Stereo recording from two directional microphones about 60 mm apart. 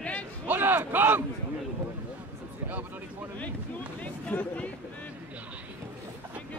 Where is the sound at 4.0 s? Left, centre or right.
Left.